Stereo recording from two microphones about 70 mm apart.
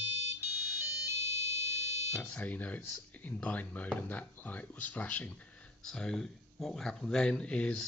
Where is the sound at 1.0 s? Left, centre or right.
Right.